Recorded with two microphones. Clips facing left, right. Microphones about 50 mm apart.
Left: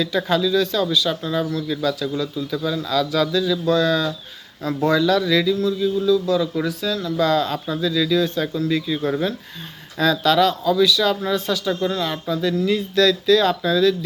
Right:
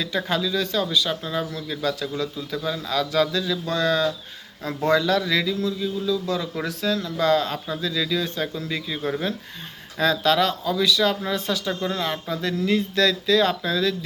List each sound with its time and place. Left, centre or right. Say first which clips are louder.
0.3 s a man's voice: left 7 dB; centre
1.8 s a man's voice: even; right
5.4 s a man's voice: left 5 dB; centre
6.6 s a man's voice: left 2 dB; right; by 9.0 s centre
9.0 s speech: left 2 dB; centre
10.0 s a man's voice: left 3 dB; right